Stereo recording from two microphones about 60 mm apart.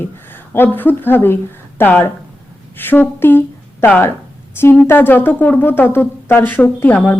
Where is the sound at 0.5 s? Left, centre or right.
Left.